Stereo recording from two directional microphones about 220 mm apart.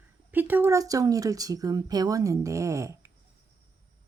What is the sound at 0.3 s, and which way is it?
Speech, 10° right (ahead or behind).